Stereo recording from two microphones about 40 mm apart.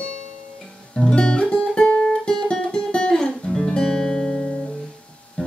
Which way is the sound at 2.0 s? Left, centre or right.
Centre.